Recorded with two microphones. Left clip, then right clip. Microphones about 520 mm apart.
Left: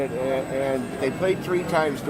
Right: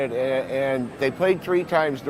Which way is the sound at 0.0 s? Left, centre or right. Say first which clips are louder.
Right 2 dB; right.